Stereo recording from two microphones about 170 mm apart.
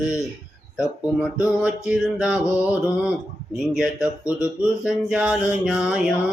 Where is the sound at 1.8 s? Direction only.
5° right (ahead or behind).